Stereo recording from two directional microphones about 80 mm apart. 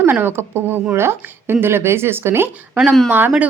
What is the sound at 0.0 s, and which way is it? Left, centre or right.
A woman's voice, right.